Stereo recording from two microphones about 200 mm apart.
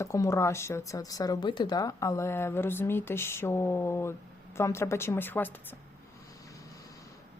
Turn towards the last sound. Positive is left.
turn(degrees=15)  # may be behind; listen again after turning